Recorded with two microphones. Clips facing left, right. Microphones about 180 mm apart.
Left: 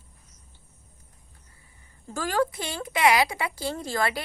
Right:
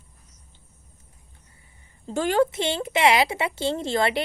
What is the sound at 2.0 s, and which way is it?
A woman's voice, 25° right (ahead or behind).